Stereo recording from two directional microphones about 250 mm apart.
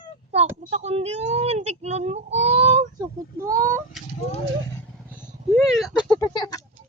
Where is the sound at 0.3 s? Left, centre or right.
Right.